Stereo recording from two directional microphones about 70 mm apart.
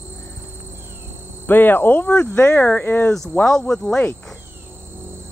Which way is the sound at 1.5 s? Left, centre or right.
Left.